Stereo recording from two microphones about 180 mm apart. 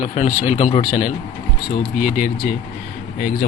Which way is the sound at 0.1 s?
40° left (ahead or behind).